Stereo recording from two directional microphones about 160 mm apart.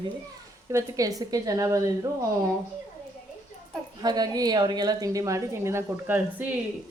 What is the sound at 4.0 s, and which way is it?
A woman's voice, 25° right (ahead or behind).